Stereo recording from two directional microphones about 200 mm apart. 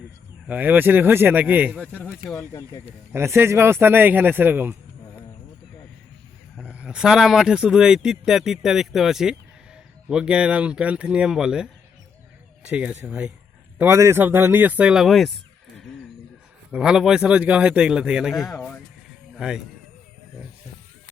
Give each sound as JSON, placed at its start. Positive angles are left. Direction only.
{"t": 0.4, "sound": "speech", "side_deg": -10}
{"t": 1.8, "sound": "speech", "side_deg": 10}
{"t": 3.1, "sound": "speech", "side_deg": -15}
{"t": 6.6, "sound": "speech", "side_deg": -5}
{"t": 16.7, "sound": "speech", "side_deg": -5}